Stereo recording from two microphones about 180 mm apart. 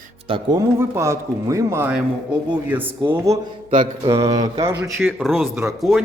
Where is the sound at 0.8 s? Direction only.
15° right (ahead or behind).